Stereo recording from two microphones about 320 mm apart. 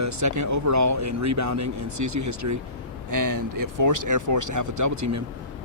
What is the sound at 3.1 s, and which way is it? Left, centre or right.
Speech, right.